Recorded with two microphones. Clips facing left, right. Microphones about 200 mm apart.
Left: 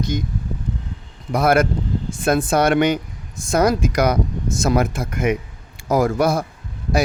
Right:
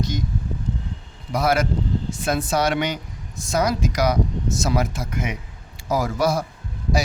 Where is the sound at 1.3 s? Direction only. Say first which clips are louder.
Left 4 dB; 55° left (ahead or behind).